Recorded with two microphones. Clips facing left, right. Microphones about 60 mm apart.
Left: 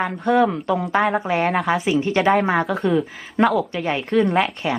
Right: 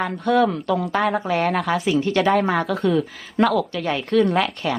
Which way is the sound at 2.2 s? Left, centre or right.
Centre.